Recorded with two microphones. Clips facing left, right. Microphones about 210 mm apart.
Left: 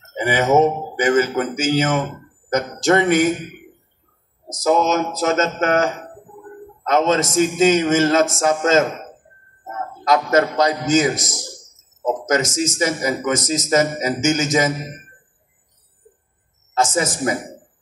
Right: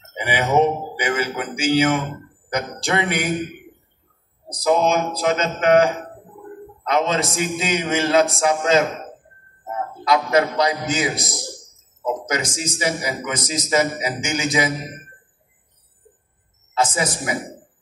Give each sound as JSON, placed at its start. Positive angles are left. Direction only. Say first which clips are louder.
{"t": 0.1, "sound": "a man's voice", "louder": "left 4 dB", "side_deg": 45}
{"t": 4.5, "sound": "a man's voice", "louder": "left 1 dB", "side_deg": 45}
{"t": 16.7, "sound": "a man's voice", "louder": "left 2 dB", "side_deg": 45}